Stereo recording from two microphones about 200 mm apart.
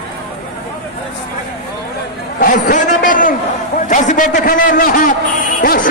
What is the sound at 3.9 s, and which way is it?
A man's voice, 40° left (ahead or behind).